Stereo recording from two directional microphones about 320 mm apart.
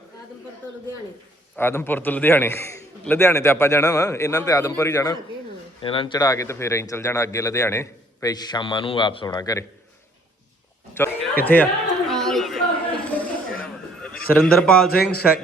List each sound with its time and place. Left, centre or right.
1.5 s speech: centre
10.9 s chatter: centre
13.1 s a sound: centre
14.4 s a man's voice: centre
14.8 s a man's voice: left